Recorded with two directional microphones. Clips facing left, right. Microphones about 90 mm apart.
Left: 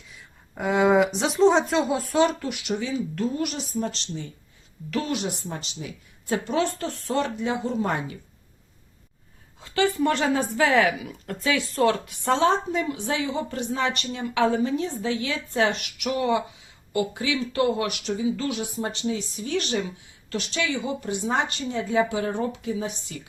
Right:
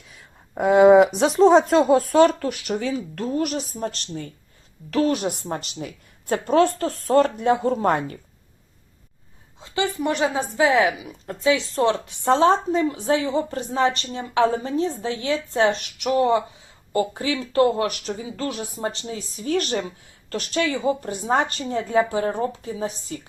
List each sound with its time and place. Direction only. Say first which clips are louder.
0.5 s a woman's voice: right 7 dB; 50° right (ahead or behind)
1.5 s speech: right 4 dB; 5° right (ahead or behind)
1.9 s a woman's voice: right 6 dB; 50° right (ahead or behind)
9.6 s a sound: left 2 dB; 20° right (ahead or behind)
10.0 s a woman's voice: even; 20° right (ahead or behind); by 23.2 s 35° right (ahead or behind)